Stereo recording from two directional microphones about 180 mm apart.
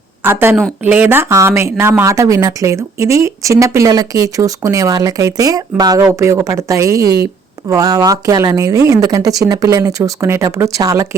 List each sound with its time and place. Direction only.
0.2 s a woman's voice: 15° right (ahead or behind)